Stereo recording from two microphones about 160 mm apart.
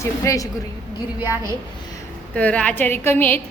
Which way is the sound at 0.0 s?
20° left (ahead or behind).